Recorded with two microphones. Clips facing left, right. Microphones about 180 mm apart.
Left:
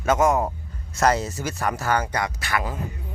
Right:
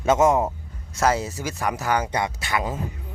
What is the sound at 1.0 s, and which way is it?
A man's voice, 10° right (ahead or behind).